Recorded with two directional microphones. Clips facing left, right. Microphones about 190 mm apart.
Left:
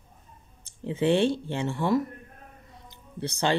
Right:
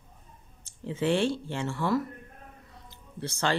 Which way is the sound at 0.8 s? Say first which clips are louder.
Left 3 dB; 20° left (ahead or behind).